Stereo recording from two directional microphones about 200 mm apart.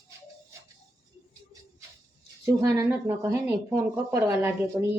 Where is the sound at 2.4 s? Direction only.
15° right (ahead or behind).